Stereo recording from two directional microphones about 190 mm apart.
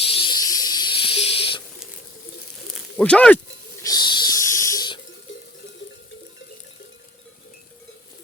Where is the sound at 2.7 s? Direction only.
5° left (ahead or behind).